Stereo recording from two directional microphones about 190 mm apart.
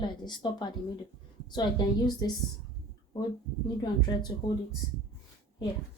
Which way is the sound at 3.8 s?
20° left (ahead or behind).